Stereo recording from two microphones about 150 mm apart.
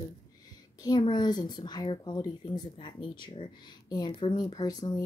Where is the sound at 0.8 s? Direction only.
30° left (ahead or behind).